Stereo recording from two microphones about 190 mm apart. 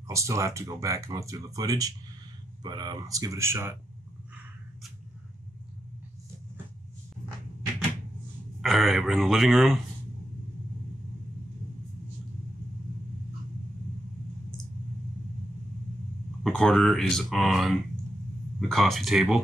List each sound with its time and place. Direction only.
0.1 s speech: 15° right (ahead or behind)
8.5 s speech: centre (ahead or behind)
16.4 s speech: 5° left (ahead or behind)